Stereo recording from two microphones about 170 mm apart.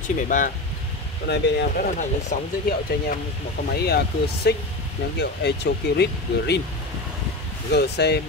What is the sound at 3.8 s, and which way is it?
Speech, 70° left (ahead or behind).